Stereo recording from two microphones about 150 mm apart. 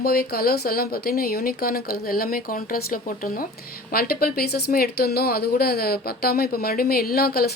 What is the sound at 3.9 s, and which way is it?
Speech, 85° left.